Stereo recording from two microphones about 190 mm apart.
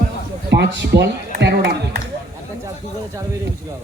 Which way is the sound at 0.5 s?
65° right (ahead or behind).